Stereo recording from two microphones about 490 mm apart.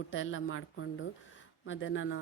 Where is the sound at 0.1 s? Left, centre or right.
Left.